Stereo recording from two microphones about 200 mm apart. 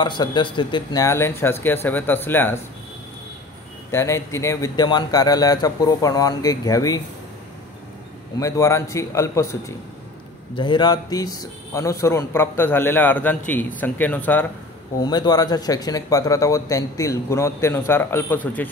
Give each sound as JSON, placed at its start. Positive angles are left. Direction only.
{"t": 0.0, "sound": "speech", "side_deg": 25}
{"t": 3.9, "sound": "speech", "side_deg": 15}
{"t": 8.4, "sound": "speech", "side_deg": 15}
{"t": 15.0, "sound": "speech", "side_deg": 20}